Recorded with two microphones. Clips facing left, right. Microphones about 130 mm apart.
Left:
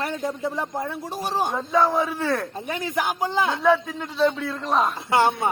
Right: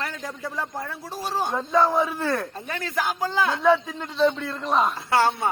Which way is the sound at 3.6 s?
Centre (ahead or behind).